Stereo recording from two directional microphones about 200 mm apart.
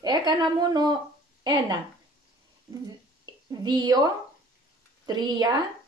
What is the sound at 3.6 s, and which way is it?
Speech, 20° right (ahead or behind).